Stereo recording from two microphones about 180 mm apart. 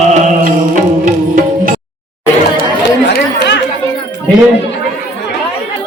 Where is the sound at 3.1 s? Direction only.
70° left (ahead or behind).